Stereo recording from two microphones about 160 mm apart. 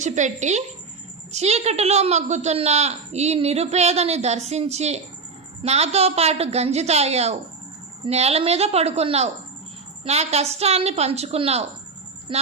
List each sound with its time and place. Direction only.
0.0 s a woman's voice: 50° right (ahead or behind); by 12.4 s 30° right (ahead or behind)